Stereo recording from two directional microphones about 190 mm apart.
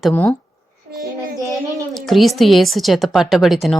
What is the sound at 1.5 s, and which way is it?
Speech, centre (ahead or behind).